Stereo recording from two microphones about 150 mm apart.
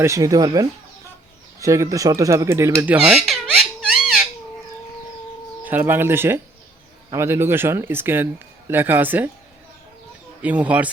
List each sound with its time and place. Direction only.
0.0 s speech: 20° right (ahead or behind); by 4.3 s 5° right (ahead or behind)
5.6 s a man's voice: 15° right (ahead or behind)
10.4 s a man's voice: 10° right (ahead or behind)